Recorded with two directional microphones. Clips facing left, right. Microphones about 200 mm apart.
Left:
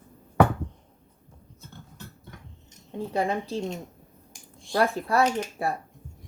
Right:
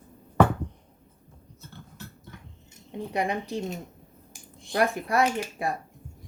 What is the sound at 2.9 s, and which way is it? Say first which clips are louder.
Speech: left 2 dB; 15° right (ahead or behind).